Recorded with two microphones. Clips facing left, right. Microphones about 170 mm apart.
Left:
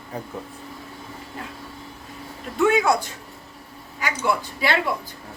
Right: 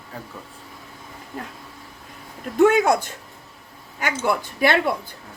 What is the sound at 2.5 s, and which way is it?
Speech, 45° right (ahead or behind).